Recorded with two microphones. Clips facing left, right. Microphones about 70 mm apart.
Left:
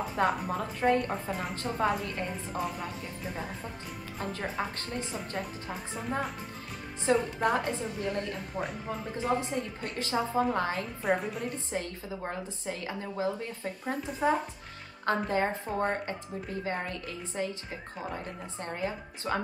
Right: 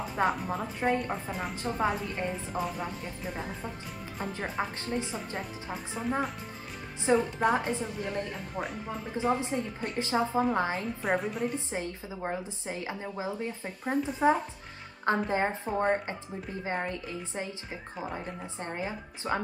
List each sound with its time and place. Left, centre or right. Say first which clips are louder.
0.1 s a woman's voice: right 1 dB; centre
4.2 s a woman's voice: right 1 dB; centre
5.7 s a woman's voice: right 2 dB; centre
7.3 s a woman's voice: right 1 dB; centre
9.1 s a woman's voice: right 2 dB; right
10.8 s a woman's voice: even; centre
11.7 s a woman's voice: even; centre
17.6 s a woman's voice: right 1 dB; centre